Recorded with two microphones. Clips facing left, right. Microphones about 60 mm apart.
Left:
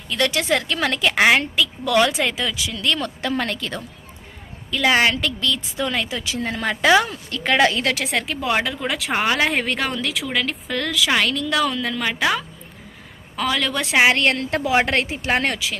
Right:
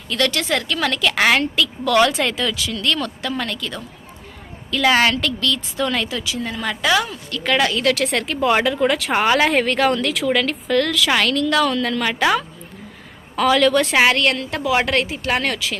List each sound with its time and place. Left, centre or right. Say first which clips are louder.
0.1 s a woman's voice: even; centre; by 3.8 s left
4.7 s a woman's voice: right 2 dB; centre
6.2 s a woman's voice: left 1 dB; left
7.9 s speech: right 3 dB; centre
14.1 s a woman's voice: even; left
15.5 s a woman's voice: right 2 dB; centre